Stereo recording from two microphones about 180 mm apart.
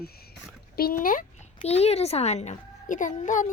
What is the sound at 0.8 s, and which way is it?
Speech, 60° left (ahead or behind).